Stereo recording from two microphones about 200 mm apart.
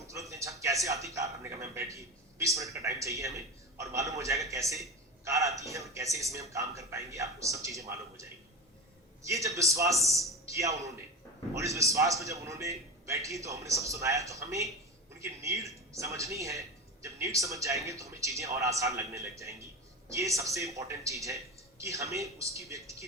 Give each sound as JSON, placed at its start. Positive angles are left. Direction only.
{"t": 0.1, "sound": "a man's voice", "side_deg": -15}